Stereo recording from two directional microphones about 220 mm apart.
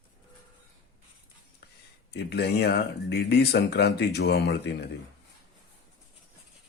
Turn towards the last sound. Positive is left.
turn(degrees=50)  # may be behind; listen again after turning